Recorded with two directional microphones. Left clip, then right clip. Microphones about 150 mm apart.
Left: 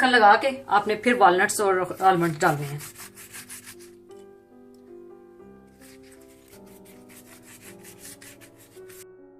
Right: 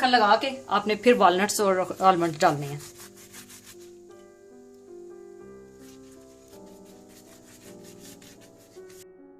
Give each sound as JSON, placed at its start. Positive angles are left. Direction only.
{"t": 0.0, "sound": "a woman's voice", "side_deg": -75}